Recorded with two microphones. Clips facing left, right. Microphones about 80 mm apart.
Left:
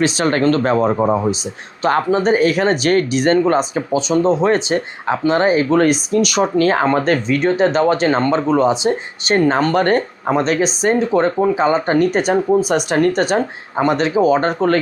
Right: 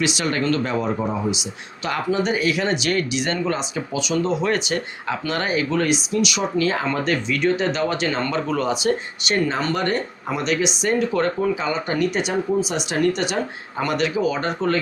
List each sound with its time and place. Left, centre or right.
0.0 s speech: left
9.3 s speech: left